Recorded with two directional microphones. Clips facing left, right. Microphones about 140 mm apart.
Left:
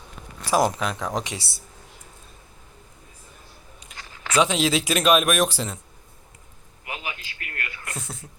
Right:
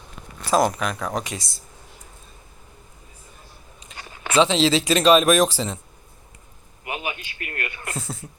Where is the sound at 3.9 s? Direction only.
20° right (ahead or behind).